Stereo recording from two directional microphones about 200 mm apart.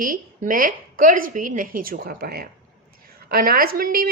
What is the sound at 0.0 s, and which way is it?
A woman's voice, 45° right (ahead or behind).